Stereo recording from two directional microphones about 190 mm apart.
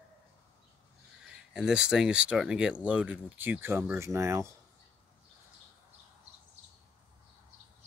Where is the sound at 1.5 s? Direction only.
5° right (ahead or behind).